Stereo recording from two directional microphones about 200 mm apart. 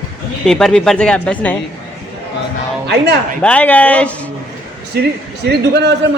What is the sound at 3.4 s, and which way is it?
Speech, 5° left (ahead or behind).